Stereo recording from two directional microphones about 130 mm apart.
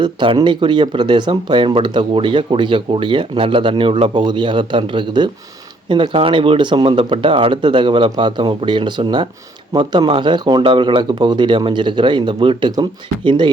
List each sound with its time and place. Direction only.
0.0 s speech: 40° right (ahead or behind)